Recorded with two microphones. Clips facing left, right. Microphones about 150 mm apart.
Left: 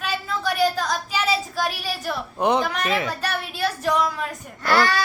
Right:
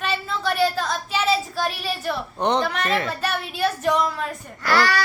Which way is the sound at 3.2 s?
5° right (ahead or behind).